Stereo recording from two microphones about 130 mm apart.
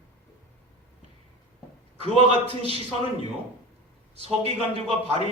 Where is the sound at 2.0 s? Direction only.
50° right (ahead or behind).